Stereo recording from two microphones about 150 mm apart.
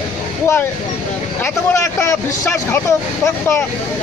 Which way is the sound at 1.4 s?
20° left (ahead or behind).